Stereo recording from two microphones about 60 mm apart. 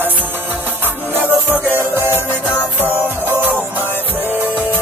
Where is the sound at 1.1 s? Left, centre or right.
Right.